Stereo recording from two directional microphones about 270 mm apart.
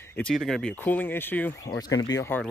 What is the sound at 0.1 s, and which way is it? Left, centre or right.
Speech, centre.